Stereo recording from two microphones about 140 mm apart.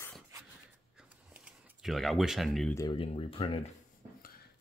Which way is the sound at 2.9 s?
40° left (ahead or behind).